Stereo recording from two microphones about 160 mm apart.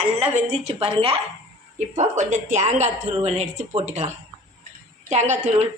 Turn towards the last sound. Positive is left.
turn(degrees=-45)  # may be behind; listen again after turning